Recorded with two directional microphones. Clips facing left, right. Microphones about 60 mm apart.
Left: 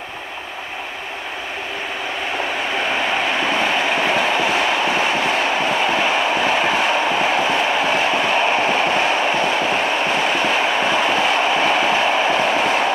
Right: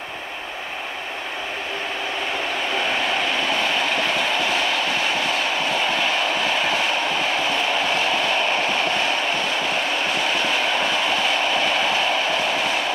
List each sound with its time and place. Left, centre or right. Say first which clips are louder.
3.1 s train: left 3 dB; left